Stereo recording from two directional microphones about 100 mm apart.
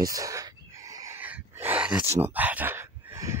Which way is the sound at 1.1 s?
15° right (ahead or behind).